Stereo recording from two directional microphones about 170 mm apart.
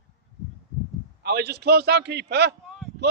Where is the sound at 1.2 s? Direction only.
70° right (ahead or behind).